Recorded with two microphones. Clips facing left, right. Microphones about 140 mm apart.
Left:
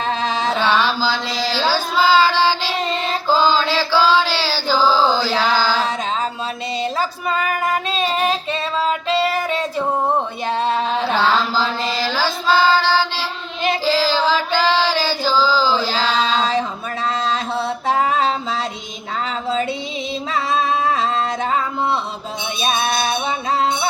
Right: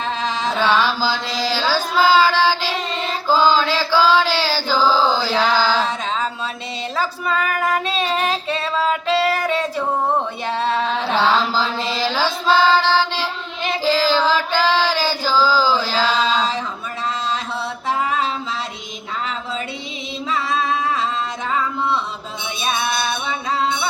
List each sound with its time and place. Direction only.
0.6 s carnatic music: 10° right (ahead or behind)
1.7 s child singing: 10° right (ahead or behind)
3.2 s chant: 10° right (ahead or behind)
11.1 s mantra: centre (ahead or behind)
12.1 s music: 5° left (ahead or behind)
12.6 s child singing: 20° right (ahead or behind)
12.9 s child singing: 10° left (ahead or behind)
13.8 s music: 15° right (ahead or behind)
14.5 s female singing: 15° right (ahead or behind)
15.8 s a sound: 15° left (ahead or behind)
20.5 s music: 35° left (ahead or behind)
22.6 s music: 35° left (ahead or behind)